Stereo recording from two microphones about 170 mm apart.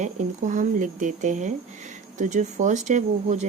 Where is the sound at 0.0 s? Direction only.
45° right (ahead or behind).